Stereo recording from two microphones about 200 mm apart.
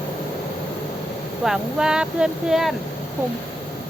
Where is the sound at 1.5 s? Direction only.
5° right (ahead or behind).